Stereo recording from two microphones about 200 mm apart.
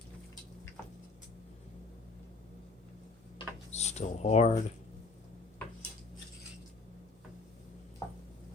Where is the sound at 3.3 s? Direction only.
35° left (ahead or behind).